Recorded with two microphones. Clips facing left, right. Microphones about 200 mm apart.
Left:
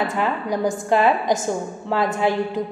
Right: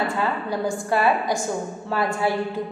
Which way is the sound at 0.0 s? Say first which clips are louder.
Left 2 dB; 20° left (ahead or behind).